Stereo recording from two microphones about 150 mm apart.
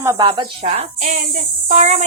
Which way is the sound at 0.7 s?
50° right (ahead or behind).